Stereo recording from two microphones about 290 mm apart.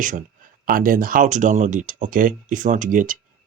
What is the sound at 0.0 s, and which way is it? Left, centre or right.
Speech, right.